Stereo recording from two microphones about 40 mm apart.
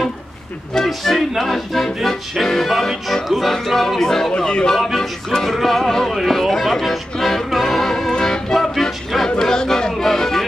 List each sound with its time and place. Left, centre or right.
0.8 s music: centre
4.4 s speech: centre
4.9 s music: centre